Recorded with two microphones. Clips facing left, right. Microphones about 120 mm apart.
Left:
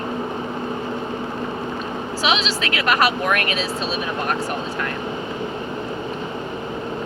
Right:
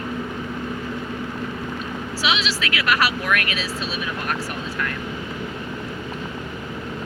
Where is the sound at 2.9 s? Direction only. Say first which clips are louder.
Left 3 dB; 35° left (ahead or behind).